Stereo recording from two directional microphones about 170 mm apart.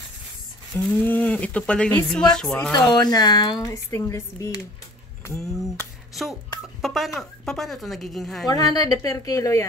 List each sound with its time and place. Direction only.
0.7 s speech: 5° left (ahead or behind)
2.7 s a woman's voice: 20° left (ahead or behind)
5.2 s a sound: 15° left (ahead or behind)
6.6 s a sound: centre (ahead or behind)
7.2 s speech: centre (ahead or behind)
8.5 s a woman's voice: 20° left (ahead or behind)